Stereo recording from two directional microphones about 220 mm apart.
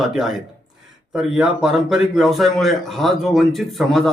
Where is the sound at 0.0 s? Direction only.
Centre (ahead or behind).